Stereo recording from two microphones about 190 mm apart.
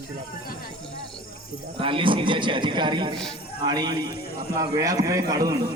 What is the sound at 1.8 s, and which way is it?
A man's voice, 25° right (ahead or behind).